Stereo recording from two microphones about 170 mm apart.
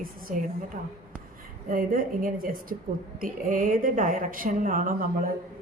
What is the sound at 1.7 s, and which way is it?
A woman's voice, 55° right (ahead or behind).